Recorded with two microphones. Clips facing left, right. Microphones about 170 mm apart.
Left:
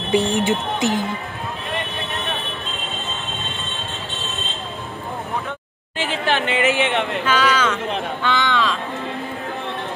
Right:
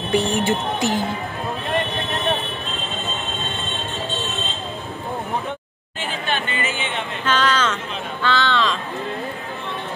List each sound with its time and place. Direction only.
0.1 s speech: 20° left (ahead or behind)
5.9 s speech: 85° left
7.2 s speech: 10° left (ahead or behind)